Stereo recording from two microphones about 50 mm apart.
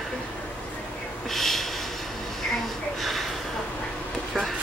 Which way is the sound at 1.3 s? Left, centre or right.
Centre.